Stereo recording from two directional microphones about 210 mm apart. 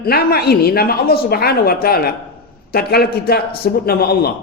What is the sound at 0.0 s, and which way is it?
A man's voice, 50° left (ahead or behind).